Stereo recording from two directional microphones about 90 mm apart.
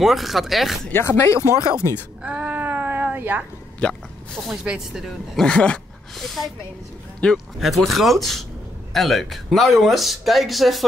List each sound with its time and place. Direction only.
0.0 s speech: centre (ahead or behind)
0.9 s speech: 30° left (ahead or behind)
2.2 s a sound: 15° right (ahead or behind)
3.8 s speech: 10° left (ahead or behind)
4.6 s speech: 5° right (ahead or behind)
5.4 s speech: 10° left (ahead or behind)
7.2 s speech: 10° left (ahead or behind)
7.6 s speech: centre (ahead or behind)